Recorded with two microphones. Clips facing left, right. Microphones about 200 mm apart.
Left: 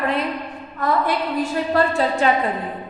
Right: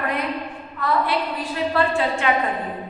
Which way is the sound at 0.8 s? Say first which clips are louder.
Left 1 dB; 45° left (ahead or behind).